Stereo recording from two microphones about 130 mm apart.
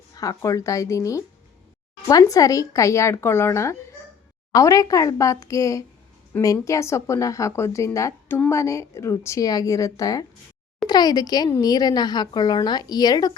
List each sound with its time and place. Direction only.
0.2 s a woman's voice: 25° left (ahead or behind)